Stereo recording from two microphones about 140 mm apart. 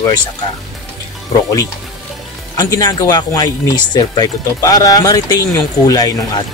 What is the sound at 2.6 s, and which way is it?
Speech, 25° left (ahead or behind).